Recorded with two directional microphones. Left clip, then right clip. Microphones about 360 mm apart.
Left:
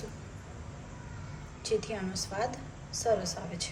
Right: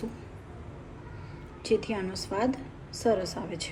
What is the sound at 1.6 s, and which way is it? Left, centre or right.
A woman's voice, right.